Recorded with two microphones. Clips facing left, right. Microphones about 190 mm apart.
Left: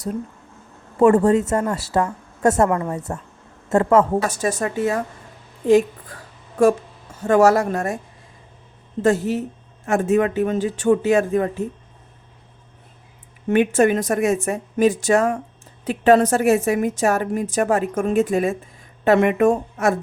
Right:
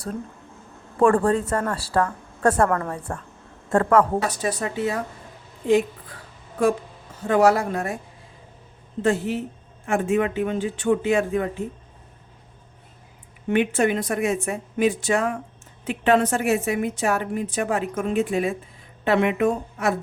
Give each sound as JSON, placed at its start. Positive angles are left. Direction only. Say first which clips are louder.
{"t": 0.9, "sound": "a woman's voice", "louder": "left 4 dB", "side_deg": 25}
{"t": 2.6, "sound": "a woman's voice", "louder": "left 2 dB", "side_deg": 15}
{"t": 3.7, "sound": "a woman's voice", "louder": "left 2 dB", "side_deg": 25}
{"t": 4.3, "sound": "a woman's voice", "louder": "left 3 dB", "side_deg": 45}
{"t": 7.2, "sound": "a woman's voice", "louder": "left 3 dB", "side_deg": 45}
{"t": 9.0, "sound": "speech", "louder": "left 4 dB", "side_deg": 40}
{"t": 13.5, "sound": "a woman's voice", "louder": "left 4 dB", "side_deg": 45}